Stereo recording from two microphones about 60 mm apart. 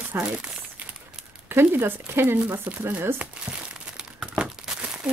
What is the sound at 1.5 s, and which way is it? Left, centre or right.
Speech, right.